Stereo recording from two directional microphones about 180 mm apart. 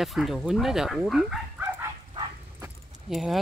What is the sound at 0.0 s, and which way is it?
Speech, centre (ahead or behind).